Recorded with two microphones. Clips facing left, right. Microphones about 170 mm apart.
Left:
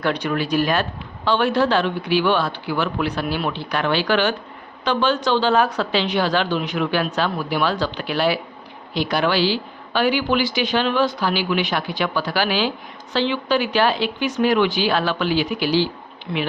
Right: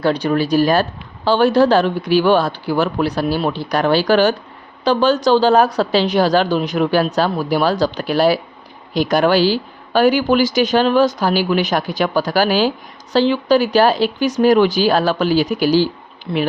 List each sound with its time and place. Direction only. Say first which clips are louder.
0.0 s speech: right 5 dB; 35° right (ahead or behind)